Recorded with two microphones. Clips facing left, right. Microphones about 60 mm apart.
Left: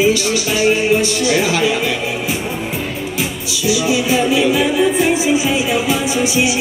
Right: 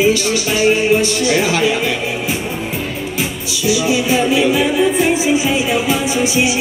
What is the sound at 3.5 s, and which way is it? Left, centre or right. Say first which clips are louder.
Music: right 1 dB; right.